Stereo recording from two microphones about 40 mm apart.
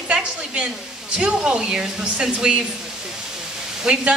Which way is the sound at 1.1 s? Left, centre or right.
Right.